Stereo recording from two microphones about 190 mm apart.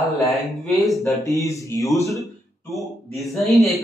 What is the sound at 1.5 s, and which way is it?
Speech, 15° left (ahead or behind).